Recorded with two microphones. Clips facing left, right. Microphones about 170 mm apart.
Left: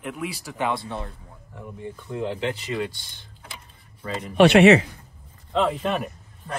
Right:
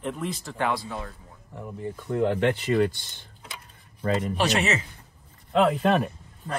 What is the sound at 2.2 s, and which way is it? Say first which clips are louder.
Speech: right 5 dB; 55° right (ahead or behind).